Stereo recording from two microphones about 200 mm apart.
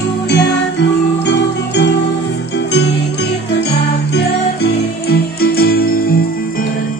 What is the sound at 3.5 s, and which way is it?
Music, 55° left (ahead or behind).